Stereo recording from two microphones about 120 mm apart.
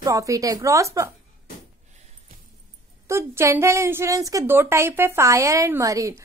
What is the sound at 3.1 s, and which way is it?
A woman's voice, 25° right (ahead or behind).